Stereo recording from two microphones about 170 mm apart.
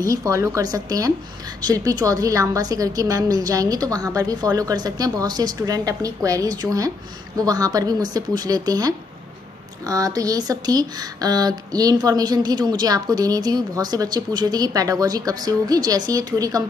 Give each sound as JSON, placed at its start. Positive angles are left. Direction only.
{"t": 0.0, "sound": "speech", "side_deg": -20}